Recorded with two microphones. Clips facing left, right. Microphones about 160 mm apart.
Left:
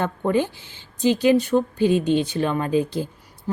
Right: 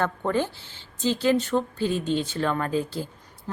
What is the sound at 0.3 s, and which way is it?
A woman's voice, 15° left (ahead or behind).